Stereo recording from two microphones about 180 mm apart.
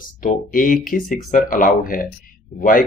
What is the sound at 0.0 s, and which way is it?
Speech, 50° left (ahead or behind).